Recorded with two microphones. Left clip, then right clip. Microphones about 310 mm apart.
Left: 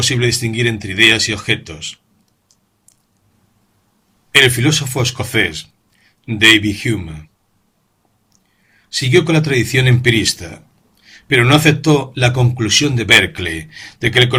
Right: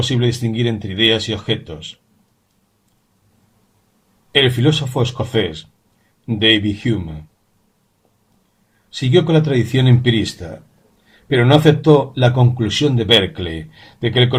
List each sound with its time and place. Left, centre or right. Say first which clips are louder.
0.3 s speech: left 3 dB; left
4.4 s speech: left 4 dB; left
9.1 s speech: left 1 dB; left
11.3 s speech: left 1 dB; left